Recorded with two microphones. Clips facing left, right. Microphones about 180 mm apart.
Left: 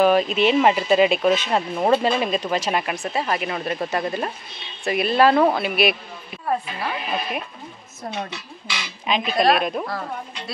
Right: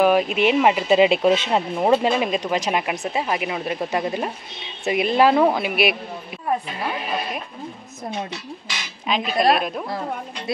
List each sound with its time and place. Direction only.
0.0 s speech: 10° right (ahead or behind)
1.8 s speech: 15° right (ahead or behind)
9.0 s speech: centre (ahead or behind)